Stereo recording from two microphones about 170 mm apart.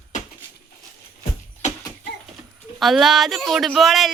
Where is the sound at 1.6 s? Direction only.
45° left (ahead or behind).